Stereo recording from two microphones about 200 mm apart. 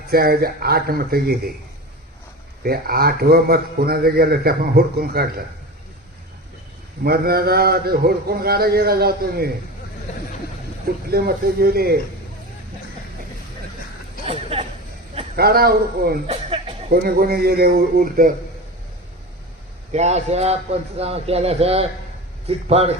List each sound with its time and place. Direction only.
0.1 s a man's voice: 50° right (ahead or behind)
2.6 s a man's voice: 50° right (ahead or behind)
7.0 s a man's voice: 50° right (ahead or behind)
11.1 s a man's voice: 50° right (ahead or behind)
14.3 s chatter: 30° right (ahead or behind)
15.4 s a man's voice: 50° right (ahead or behind)
16.2 s a sound: 30° right (ahead or behind)
16.9 s a man's voice: 50° right (ahead or behind)
19.9 s speech: 35° right (ahead or behind)